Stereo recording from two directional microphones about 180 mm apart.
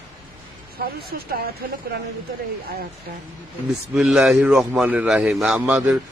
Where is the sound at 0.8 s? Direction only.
60° right (ahead or behind).